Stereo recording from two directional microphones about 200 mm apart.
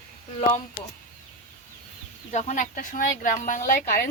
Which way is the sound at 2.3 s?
35° left (ahead or behind).